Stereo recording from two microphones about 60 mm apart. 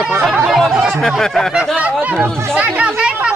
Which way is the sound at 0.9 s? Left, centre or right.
Centre.